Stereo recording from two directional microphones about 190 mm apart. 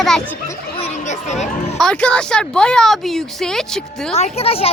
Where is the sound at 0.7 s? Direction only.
35° left (ahead or behind).